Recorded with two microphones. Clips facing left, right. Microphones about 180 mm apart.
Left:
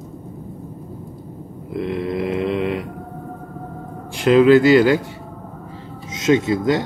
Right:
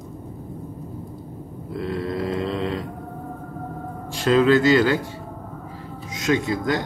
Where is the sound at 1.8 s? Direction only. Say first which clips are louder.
Left 3 dB; 20° left (ahead or behind).